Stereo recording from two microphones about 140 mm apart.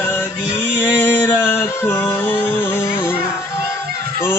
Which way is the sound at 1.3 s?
15° left (ahead or behind).